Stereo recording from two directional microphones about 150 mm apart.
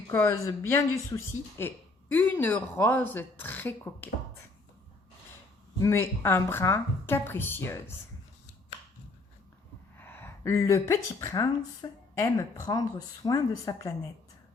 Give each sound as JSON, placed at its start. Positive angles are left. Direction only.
{"t": 0.1, "sound": "speech", "side_deg": 20}
{"t": 5.8, "sound": "speech", "side_deg": 15}
{"t": 10.0, "sound": "speech", "side_deg": 15}